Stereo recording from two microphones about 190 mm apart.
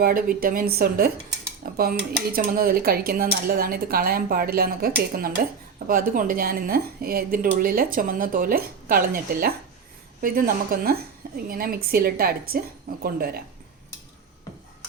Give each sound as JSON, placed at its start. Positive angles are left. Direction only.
{"t": 0.0, "sound": "speech", "side_deg": -50}